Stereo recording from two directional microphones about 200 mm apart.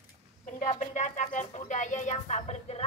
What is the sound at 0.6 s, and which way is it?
Music, 35° left (ahead or behind).